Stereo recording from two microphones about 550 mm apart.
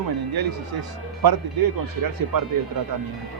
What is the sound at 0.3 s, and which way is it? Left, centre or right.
Speech, right.